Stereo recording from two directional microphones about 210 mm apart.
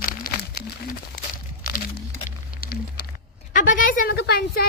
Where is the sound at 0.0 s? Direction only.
45° left (ahead or behind).